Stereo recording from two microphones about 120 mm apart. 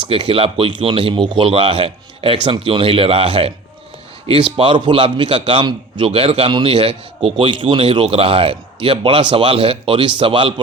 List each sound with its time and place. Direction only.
0.1 s a man's voice: 50° right (ahead or behind)